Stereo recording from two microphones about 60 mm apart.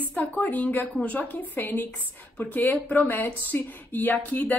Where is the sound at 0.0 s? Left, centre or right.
Left.